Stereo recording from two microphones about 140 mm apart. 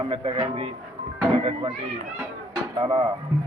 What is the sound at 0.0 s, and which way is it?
Speech, 40° right (ahead or behind).